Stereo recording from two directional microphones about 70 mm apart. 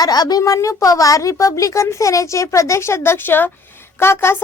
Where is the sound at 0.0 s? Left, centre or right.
Left.